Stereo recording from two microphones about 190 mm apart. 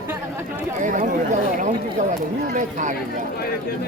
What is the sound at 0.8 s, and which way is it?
Speech, 40° right (ahead or behind).